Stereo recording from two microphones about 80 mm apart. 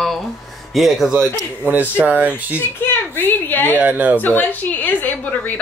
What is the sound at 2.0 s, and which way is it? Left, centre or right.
Speech, centre.